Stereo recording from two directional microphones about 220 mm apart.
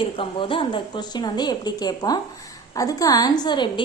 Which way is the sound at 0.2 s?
25° left (ahead or behind).